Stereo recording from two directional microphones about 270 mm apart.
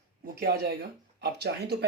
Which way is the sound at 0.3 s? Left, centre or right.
Right.